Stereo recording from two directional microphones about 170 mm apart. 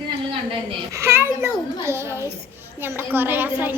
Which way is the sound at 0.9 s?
15° right (ahead or behind).